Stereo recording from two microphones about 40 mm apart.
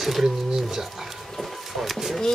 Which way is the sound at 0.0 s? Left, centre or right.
Centre.